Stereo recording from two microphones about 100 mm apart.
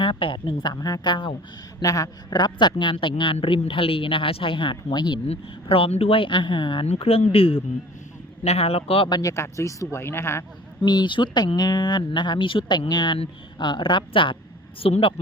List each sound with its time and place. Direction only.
0.0 s speech: 55° left (ahead or behind)
0.7 s speech: 35° left (ahead or behind); by 1.4 s 55° left (ahead or behind)
1.8 s speech: 35° left (ahead or behind); by 3.3 s 55° left (ahead or behind)
3.3 s speech: 75° left (ahead or behind); by 5.2 s 50° left (ahead or behind)
5.2 s speech: 80° left; by 6.8 s 55° left (ahead or behind)
6.8 s speech: 70° left (ahead or behind)
8.4 s speech: 90° left
9.0 s speech: 45° left (ahead or behind)
9.3 s speech: 30° left (ahead or behind)
10.8 s speech: 50° left (ahead or behind)
14.8 s speech: 70° left (ahead or behind)